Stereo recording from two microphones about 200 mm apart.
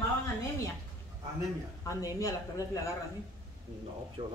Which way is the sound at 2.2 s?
15° left (ahead or behind).